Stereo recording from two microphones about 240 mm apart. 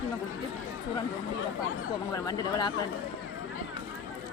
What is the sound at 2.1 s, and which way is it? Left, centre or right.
Speech, centre.